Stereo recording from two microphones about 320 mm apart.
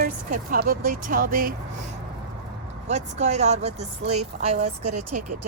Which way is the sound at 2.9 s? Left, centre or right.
Right.